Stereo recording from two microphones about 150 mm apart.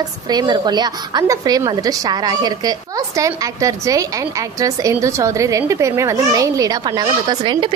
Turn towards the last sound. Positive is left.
turn(degrees=-30)  # may be behind; listen again after turning